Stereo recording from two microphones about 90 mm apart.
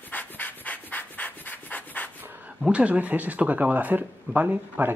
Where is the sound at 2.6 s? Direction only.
10° right (ahead or behind).